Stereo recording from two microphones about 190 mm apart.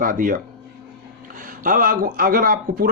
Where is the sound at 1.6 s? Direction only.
45° right (ahead or behind).